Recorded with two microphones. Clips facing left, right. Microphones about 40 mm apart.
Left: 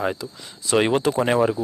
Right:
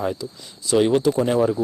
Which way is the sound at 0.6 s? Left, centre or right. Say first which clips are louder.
Right 2 dB; left.